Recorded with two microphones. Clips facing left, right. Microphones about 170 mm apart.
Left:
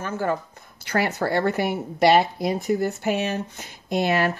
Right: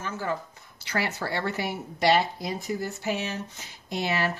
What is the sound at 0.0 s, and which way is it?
A woman's voice, 50° left (ahead or behind).